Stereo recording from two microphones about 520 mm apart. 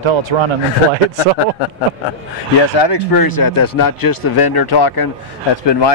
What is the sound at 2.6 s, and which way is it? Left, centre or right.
Speech, left.